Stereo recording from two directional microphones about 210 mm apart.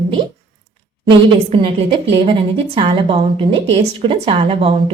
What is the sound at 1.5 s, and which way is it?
A woman's voice, 25° right (ahead or behind).